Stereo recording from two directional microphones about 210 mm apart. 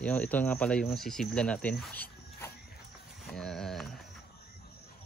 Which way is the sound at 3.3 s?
Centre (ahead or behind).